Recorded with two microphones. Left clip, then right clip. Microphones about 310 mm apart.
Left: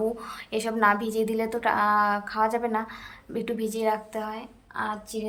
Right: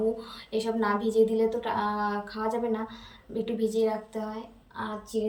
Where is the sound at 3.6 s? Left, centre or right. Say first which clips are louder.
Even; centre.